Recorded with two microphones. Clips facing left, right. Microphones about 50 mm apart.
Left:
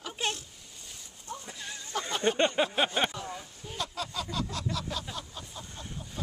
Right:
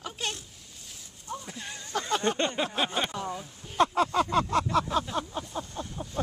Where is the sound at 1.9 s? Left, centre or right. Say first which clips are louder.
Right 5 dB; right.